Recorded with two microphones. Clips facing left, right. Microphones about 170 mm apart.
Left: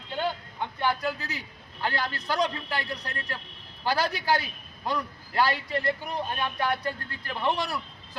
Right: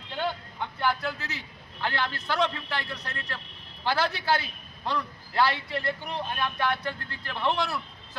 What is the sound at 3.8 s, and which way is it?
A man's voice, 15° left (ahead or behind).